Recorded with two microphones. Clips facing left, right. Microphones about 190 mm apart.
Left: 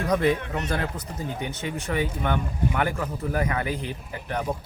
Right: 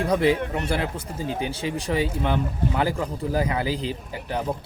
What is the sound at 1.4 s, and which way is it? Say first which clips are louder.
Speech: right 4 dB; 30° right (ahead or behind).